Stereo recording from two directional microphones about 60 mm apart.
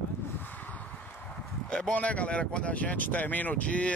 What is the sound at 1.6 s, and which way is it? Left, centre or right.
Speech, centre.